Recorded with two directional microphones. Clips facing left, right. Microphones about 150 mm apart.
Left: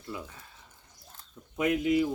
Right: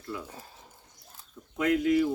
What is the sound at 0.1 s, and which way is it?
Speech, 20° left (ahead or behind).